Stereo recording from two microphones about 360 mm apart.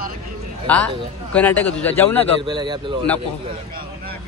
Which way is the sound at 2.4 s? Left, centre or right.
Centre.